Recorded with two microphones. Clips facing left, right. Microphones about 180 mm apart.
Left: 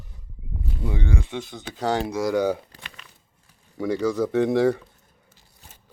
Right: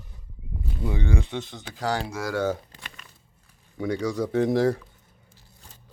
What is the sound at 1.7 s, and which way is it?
Speech, 25° left (ahead or behind).